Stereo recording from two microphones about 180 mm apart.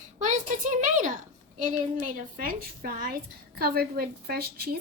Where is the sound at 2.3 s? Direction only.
55° right (ahead or behind).